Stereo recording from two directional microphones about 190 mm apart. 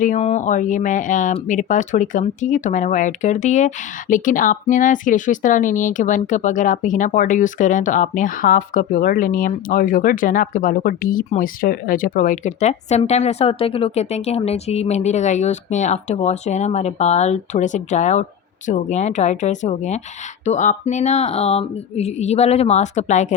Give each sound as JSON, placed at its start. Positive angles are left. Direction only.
{"t": 0.0, "sound": "speech", "side_deg": 40}